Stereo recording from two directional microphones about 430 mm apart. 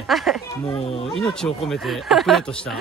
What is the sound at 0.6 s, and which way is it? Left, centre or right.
Speech, centre.